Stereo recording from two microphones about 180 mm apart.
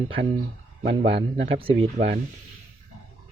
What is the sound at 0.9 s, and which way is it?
Speech, 80° right.